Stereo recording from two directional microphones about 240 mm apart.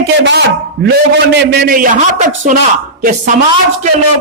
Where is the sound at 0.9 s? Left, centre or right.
Right.